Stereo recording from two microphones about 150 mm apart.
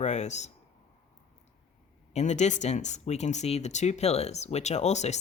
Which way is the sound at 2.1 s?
50° left (ahead or behind).